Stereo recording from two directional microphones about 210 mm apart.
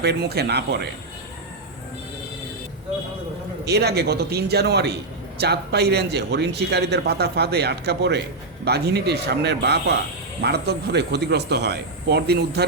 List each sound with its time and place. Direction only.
0.0 s a man's voice: 50° right (ahead or behind)
3.7 s a man's voice: 50° right (ahead or behind)